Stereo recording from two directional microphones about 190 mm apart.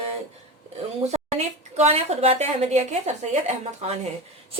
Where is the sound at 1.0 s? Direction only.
35° right (ahead or behind).